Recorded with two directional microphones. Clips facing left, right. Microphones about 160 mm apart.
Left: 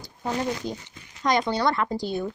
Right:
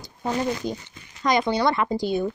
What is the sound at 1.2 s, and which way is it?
Speech, 10° right (ahead or behind).